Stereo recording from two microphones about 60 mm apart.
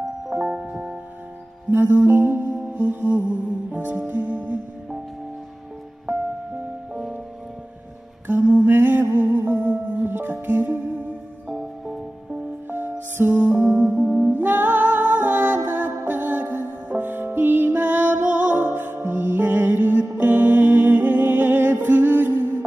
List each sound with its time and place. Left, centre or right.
0.3 s music: centre
1.7 s music: right
6.1 s music: right
6.9 s music: centre
8.3 s music: right
8.6 s music: right
12.6 s music: right; by 14.3 s centre
14.3 s music: right